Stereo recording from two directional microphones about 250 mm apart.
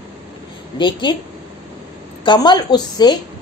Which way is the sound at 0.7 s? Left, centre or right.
Centre.